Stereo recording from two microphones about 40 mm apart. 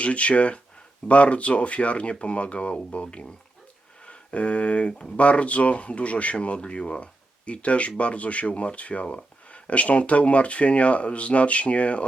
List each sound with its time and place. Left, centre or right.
0.0 s speech: left
4.9 s speech: centre
5.1 s speech: left